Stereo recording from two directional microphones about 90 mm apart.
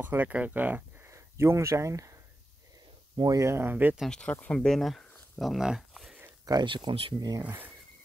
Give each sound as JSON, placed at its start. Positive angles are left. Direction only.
{"t": 0.0, "sound": "speech", "side_deg": -20}
{"t": 1.1, "sound": "speech", "side_deg": -30}
{"t": 3.2, "sound": "speech", "side_deg": -40}
{"t": 4.1, "sound": "speech", "side_deg": 15}
{"t": 4.6, "sound": "speech", "side_deg": 5}
{"t": 6.4, "sound": "speech", "side_deg": -45}
{"t": 6.7, "sound": "speech", "side_deg": -70}
{"t": 7.2, "sound": "speech", "side_deg": -45}
{"t": 7.4, "sound": "speech", "side_deg": -20}